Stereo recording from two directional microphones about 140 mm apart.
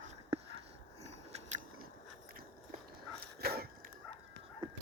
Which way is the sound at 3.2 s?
90° right.